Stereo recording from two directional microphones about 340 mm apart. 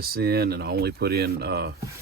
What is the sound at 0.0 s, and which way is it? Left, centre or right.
Speech, right.